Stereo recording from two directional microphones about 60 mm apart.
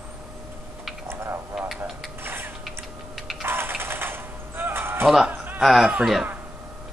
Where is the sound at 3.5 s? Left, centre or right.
Right.